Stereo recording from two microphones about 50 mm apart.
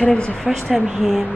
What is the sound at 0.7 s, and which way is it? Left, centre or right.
Speech, centre.